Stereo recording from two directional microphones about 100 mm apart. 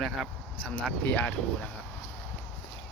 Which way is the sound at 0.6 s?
10° left (ahead or behind).